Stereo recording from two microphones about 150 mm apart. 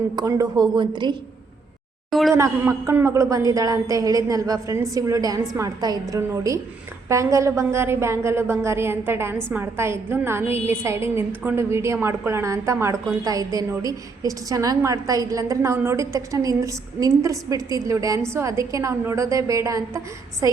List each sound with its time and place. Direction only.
0.2 s a woman's voice: 25° right (ahead or behind)
2.0 s speech: centre (ahead or behind)
2.3 s a woman's voice: 15° right (ahead or behind)